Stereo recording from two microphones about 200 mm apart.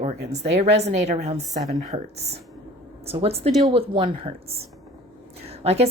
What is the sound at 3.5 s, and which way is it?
Speech, centre (ahead or behind).